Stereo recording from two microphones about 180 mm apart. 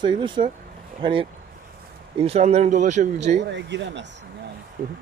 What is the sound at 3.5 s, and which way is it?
Speech, 80° right.